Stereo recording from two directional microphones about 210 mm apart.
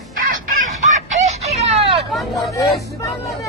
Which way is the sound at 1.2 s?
30° right (ahead or behind).